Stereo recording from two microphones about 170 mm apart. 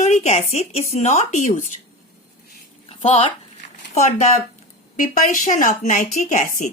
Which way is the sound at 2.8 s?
35° left (ahead or behind).